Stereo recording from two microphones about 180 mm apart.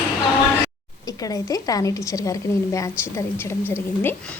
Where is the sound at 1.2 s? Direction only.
20° left (ahead or behind).